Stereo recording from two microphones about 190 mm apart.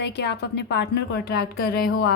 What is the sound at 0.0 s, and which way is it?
A woman's voice, 65° left (ahead or behind).